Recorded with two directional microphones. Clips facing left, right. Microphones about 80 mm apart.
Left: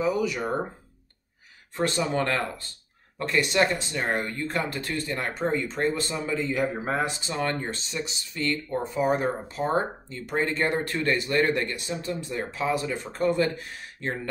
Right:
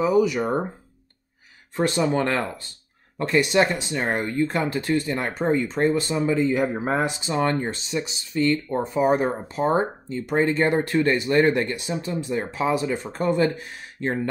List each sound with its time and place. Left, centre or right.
0.2 s speech: centre
1.8 s speech: centre